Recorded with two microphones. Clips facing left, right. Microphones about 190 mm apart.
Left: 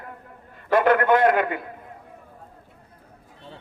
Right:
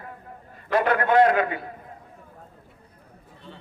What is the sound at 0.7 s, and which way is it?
Speech, 55° left (ahead or behind).